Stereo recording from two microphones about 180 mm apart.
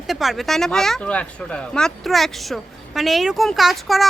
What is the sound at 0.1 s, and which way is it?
Speech, centre (ahead or behind).